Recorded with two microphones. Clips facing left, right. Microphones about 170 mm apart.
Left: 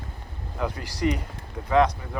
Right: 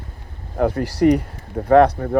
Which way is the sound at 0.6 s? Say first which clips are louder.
Right 10 dB; 60° right (ahead or behind).